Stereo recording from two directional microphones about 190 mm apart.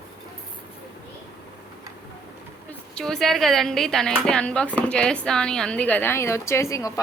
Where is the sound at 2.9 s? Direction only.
5° left (ahead or behind).